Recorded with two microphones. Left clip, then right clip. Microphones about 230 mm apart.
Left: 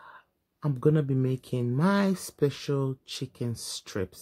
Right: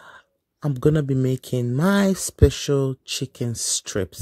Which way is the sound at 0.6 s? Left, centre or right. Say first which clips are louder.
Right 5 dB; right.